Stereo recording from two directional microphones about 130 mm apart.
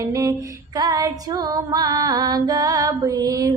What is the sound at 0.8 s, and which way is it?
Female singing, 30° right (ahead or behind).